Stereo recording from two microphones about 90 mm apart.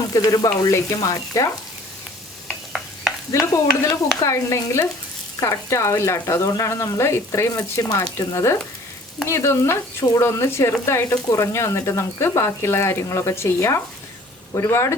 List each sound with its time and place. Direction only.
0.1 s speech: 45° left (ahead or behind)
2.5 s stir: centre (ahead or behind)
3.3 s speech: 35° left (ahead or behind)